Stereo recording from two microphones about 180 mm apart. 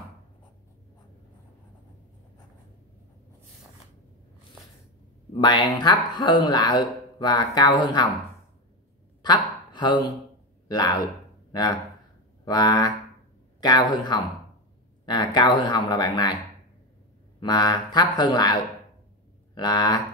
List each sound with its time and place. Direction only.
5.4 s speech: 25° left (ahead or behind)
9.2 s a sound: 25° left (ahead or behind)
10.7 s speech: 20° left (ahead or behind)
12.4 s speech: 20° left (ahead or behind)
17.4 s speech: 25° left (ahead or behind)